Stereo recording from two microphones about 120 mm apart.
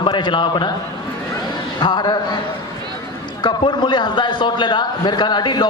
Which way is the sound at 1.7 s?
35° left (ahead or behind).